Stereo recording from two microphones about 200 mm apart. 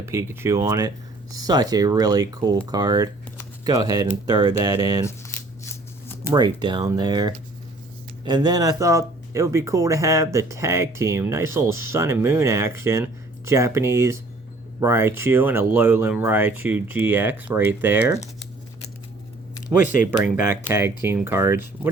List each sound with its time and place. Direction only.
0.0 s speech: 15° right (ahead or behind)
6.2 s speech: 20° right (ahead or behind)
19.7 s speech: 15° right (ahead or behind)